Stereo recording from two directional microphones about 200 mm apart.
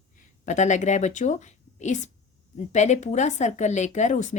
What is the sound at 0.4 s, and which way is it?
A woman's voice, 35° left (ahead or behind).